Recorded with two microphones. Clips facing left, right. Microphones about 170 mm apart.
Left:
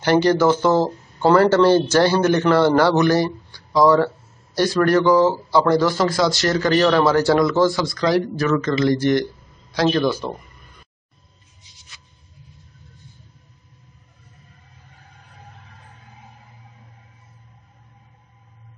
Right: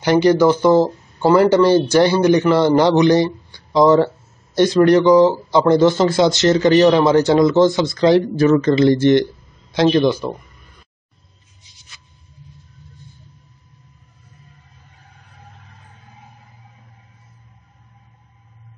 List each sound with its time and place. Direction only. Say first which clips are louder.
0.0 s a man's voice: right 3 dB; 15° right (ahead or behind)